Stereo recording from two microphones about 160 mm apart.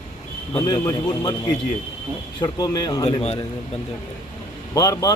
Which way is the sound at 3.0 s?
40° left (ahead or behind).